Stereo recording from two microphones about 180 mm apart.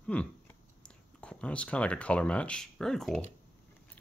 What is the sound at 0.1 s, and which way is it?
Speech, 5° left (ahead or behind).